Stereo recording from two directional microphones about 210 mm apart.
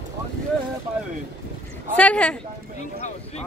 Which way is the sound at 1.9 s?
5° left (ahead or behind).